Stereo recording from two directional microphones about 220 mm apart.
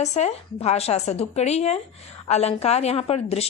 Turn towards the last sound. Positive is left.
turn(degrees=30)  # may be behind; listen again after turning